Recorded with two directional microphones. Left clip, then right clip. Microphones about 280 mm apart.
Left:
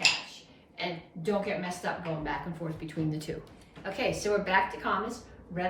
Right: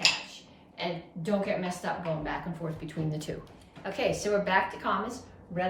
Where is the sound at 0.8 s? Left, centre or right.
Centre.